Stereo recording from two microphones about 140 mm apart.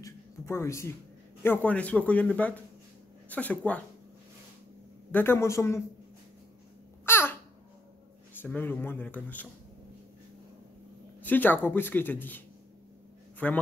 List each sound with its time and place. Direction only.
0.0 s speech: 20° left (ahead or behind)
5.1 s a man's voice: 15° left (ahead or behind)
7.1 s babbling: 15° left (ahead or behind)
8.4 s speech: 15° left (ahead or behind)
11.2 s speech: 15° left (ahead or behind)